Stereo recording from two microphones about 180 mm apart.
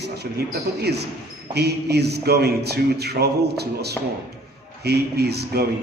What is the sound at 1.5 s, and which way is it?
A man's voice, 65° right (ahead or behind).